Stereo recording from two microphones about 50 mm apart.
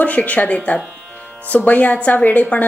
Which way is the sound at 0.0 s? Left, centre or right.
Left.